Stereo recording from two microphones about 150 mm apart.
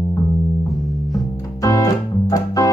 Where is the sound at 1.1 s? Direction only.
25° left (ahead or behind).